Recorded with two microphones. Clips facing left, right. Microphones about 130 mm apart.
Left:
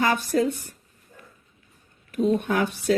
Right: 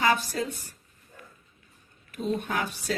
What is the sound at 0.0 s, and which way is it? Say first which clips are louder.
Speech: left 4 dB; 50° left (ahead or behind).